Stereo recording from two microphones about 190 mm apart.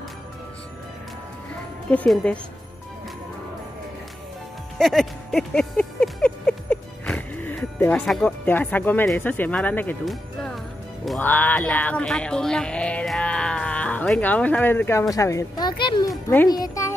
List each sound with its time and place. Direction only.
1.9 s speech: 5° left (ahead or behind)
4.7 s a sound: centre (ahead or behind)
11.1 s a child's voice: 10° left (ahead or behind)